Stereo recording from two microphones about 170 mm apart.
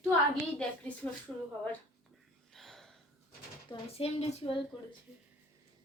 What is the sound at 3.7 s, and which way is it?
Speech, 35° left (ahead or behind).